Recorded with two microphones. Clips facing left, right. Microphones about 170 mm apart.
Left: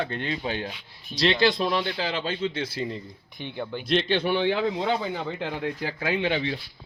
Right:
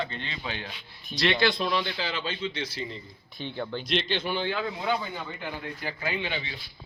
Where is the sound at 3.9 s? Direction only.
55° left (ahead or behind).